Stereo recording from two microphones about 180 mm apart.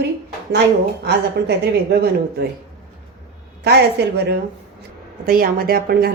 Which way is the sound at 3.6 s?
65° right (ahead or behind).